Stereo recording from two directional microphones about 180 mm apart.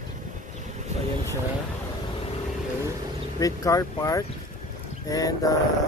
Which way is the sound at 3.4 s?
20° left (ahead or behind).